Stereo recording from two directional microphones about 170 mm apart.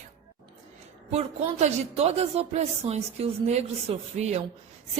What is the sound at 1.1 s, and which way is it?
A woman's voice, 40° right (ahead or behind).